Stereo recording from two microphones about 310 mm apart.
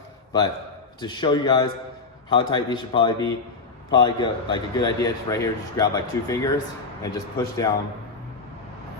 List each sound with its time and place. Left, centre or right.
1.0 s a man's voice: centre